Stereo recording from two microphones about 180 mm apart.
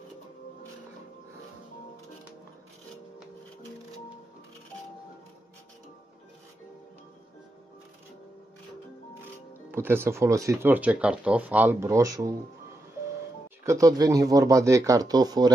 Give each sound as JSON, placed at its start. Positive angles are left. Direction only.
{"t": 9.7, "sound": "speech", "side_deg": -15}
{"t": 13.7, "sound": "speech", "side_deg": -20}